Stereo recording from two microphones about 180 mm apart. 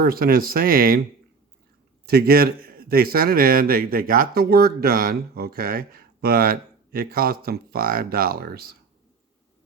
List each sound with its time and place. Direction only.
0.0 s a man's voice: 55° right (ahead or behind)
2.0 s a man's voice: 60° right (ahead or behind)